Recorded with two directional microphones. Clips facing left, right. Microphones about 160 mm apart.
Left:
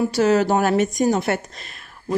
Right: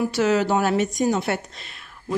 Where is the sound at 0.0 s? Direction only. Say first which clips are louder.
Left 3 dB; 35° left (ahead or behind).